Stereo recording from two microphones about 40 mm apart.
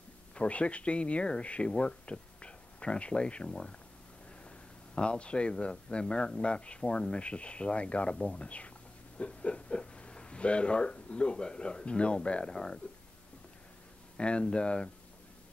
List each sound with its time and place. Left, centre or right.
0.3 s speech: left
14.1 s speech: left